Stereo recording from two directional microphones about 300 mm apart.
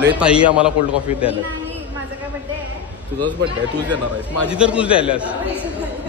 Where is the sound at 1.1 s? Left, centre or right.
Centre.